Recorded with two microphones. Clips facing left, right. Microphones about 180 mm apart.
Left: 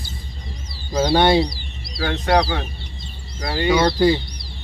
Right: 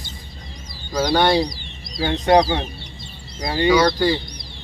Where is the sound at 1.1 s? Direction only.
25° left (ahead or behind).